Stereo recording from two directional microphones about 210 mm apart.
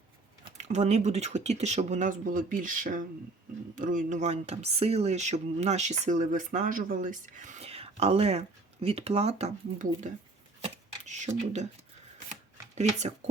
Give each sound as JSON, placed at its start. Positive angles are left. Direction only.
{"t": 0.5, "sound": "speech", "side_deg": -35}
{"t": 10.6, "sound": "a sound", "side_deg": -35}
{"t": 12.3, "sound": "shuffling cards", "side_deg": -35}